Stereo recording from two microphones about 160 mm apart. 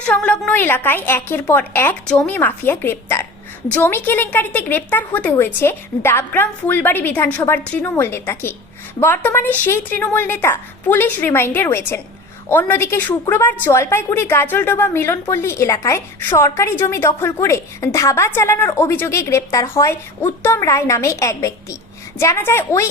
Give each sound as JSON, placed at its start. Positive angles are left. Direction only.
{"t": 0.0, "sound": "a woman's voice", "side_deg": 10}